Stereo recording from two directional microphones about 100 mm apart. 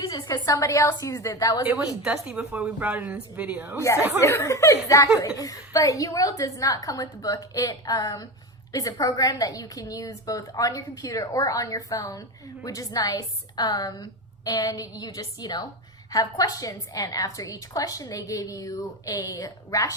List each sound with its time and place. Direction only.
0.0 s a woman's voice: 45° left (ahead or behind)
2.2 s a woman's voice: 10° right (ahead or behind)
4.2 s a woman's voice: 30° left (ahead or behind)